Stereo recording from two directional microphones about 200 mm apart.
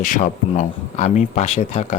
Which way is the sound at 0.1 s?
40° left (ahead or behind).